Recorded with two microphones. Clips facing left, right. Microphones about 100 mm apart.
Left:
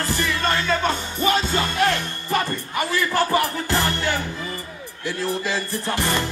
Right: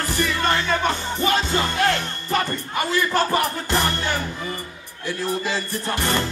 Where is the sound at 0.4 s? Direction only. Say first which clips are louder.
Even; 20° right (ahead or behind).